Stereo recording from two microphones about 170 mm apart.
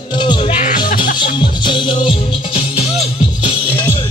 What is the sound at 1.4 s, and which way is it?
Music, 30° left (ahead or behind).